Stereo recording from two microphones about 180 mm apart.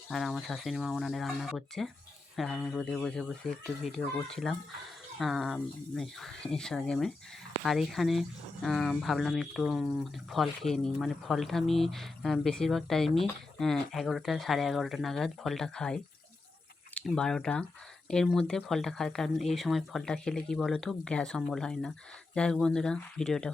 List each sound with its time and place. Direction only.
0.1 s speech: centre (ahead or behind)